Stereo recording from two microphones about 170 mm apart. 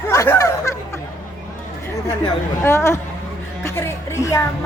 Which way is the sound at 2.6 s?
15° left (ahead or behind).